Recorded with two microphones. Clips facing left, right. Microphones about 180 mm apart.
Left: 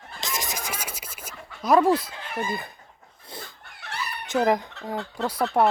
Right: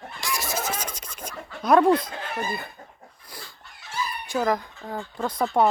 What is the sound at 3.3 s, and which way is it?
Dog, 25° left (ahead or behind).